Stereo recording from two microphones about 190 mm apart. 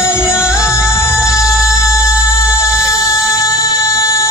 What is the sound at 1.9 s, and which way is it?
Music, 15° left (ahead or behind).